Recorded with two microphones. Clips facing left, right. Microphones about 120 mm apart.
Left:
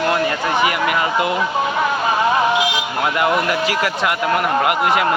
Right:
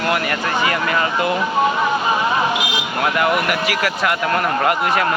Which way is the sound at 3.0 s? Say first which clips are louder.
Even; 20° left (ahead or behind).